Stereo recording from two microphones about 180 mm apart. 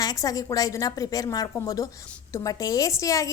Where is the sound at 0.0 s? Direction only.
20° left (ahead or behind).